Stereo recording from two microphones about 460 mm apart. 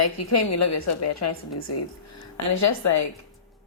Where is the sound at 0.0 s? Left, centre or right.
Left.